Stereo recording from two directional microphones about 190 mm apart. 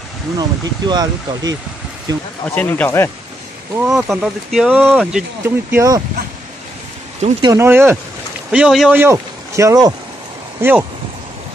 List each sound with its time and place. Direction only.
0.4 s speech: 20° right (ahead or behind)
2.4 s speech: 10° left (ahead or behind)
3.9 s speech: centre (ahead or behind); by 6.0 s 15° right (ahead or behind)
7.4 s speech: 15° right (ahead or behind)